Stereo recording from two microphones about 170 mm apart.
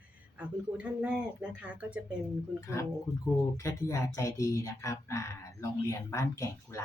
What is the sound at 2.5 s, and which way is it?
Speech, 15° left (ahead or behind).